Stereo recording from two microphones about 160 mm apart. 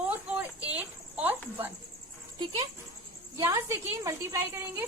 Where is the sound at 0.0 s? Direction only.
10° right (ahead or behind).